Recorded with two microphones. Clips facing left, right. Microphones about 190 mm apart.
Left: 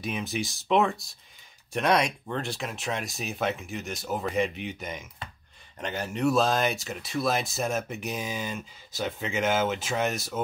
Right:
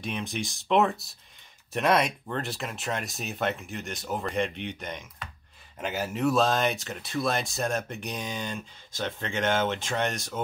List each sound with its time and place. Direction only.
0.0 s speech: 5° left (ahead or behind)